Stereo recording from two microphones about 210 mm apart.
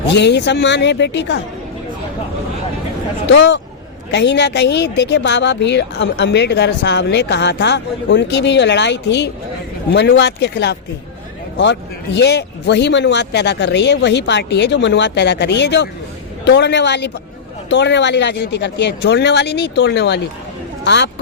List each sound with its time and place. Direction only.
0.1 s speech: 55° left (ahead or behind)
3.2 s speech: 55° left (ahead or behind)